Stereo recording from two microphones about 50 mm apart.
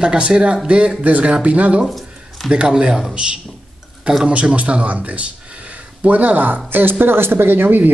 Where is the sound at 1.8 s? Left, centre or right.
Centre.